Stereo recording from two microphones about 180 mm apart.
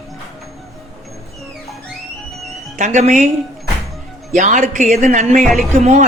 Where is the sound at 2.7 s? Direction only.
45° right (ahead or behind).